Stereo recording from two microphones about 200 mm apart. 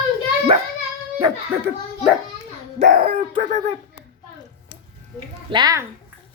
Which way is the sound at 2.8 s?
30° right (ahead or behind).